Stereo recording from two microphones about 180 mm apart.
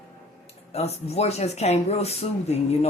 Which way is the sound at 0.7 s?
35° left (ahead or behind).